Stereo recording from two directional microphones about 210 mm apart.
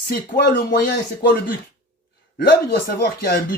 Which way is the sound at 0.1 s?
50° left (ahead or behind).